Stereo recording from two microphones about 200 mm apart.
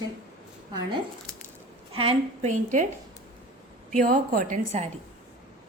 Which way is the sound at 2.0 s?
30° right (ahead or behind).